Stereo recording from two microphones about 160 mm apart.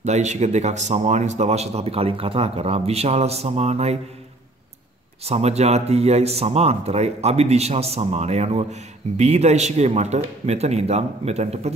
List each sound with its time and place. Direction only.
0.0 s speech: 45° right (ahead or behind)
5.2 s a man's voice: 40° right (ahead or behind)